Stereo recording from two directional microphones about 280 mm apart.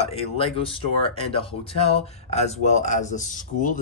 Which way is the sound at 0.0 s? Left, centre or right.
Centre.